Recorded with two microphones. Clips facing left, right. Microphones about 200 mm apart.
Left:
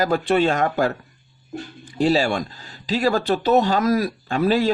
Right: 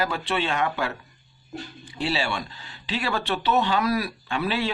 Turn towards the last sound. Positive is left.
turn(degrees=40)  # may be behind; listen again after turning